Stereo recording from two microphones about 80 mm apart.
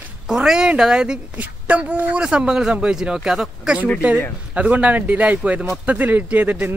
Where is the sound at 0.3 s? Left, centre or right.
Centre.